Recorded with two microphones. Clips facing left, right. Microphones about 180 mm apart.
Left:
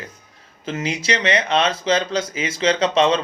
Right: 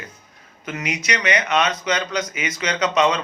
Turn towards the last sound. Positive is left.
turn(degrees=30)  # may be behind; listen again after turning